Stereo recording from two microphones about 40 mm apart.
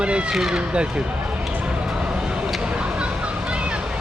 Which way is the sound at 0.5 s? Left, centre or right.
Right.